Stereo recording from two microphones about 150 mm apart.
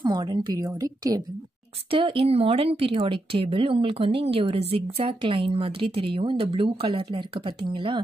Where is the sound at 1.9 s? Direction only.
35° right (ahead or behind).